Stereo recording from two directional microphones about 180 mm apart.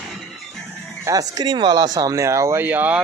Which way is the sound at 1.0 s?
20° right (ahead or behind).